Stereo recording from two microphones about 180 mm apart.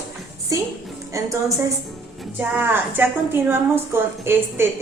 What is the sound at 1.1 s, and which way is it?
A woman's voice, 15° right (ahead or behind).